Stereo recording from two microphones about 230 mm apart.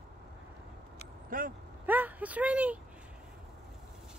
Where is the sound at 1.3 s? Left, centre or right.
Right.